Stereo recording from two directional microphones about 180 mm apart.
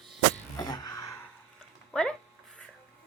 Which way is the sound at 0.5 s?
20° left (ahead or behind).